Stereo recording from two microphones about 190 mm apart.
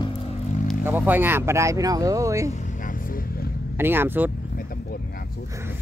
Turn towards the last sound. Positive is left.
turn(degrees=-15)  # may be behind; listen again after turning